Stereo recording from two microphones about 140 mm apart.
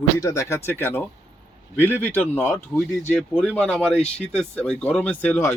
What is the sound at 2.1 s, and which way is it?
Speech, 10° left (ahead or behind).